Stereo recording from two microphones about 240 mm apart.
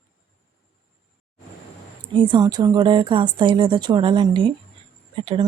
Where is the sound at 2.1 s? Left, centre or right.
Centre.